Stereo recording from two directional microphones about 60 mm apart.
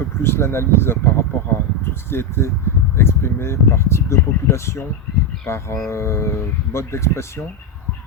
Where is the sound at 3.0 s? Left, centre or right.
Left.